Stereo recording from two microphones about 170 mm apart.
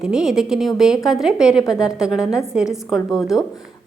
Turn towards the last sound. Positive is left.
turn(degrees=-5)  # may be behind; listen again after turning